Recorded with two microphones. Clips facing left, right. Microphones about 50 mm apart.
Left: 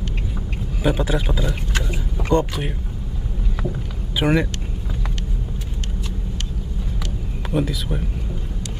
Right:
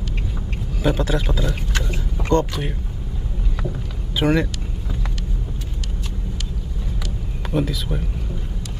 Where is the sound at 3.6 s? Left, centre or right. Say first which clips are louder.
Left 2 dB; centre.